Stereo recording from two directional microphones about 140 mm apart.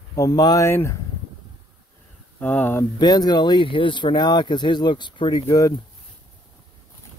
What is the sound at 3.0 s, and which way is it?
Speech, 30° left (ahead or behind).